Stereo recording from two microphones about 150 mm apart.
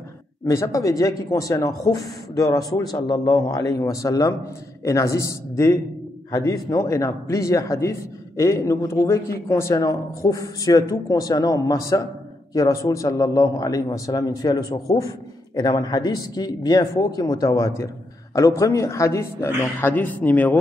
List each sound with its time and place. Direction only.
0.5 s a man's voice: 20° left (ahead or behind)